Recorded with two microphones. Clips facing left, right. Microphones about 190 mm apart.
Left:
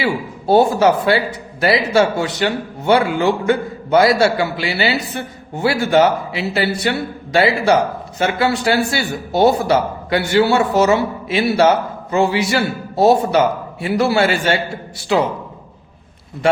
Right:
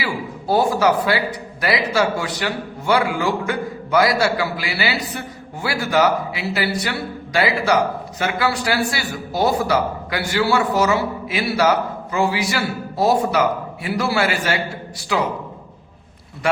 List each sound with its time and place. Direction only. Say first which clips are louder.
0.0 s a man's voice: left 5 dB; 25° left (ahead or behind)